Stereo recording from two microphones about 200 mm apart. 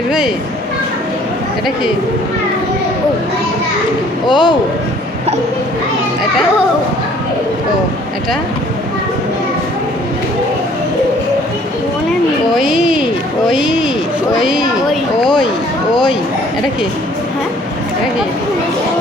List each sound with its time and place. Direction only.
4.3 s a man's voice: 25° left (ahead or behind)
12.7 s a sound: 5° right (ahead or behind)
13.5 s speech: centre (ahead or behind)